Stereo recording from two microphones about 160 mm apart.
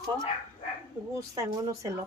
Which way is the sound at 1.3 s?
20° right (ahead or behind).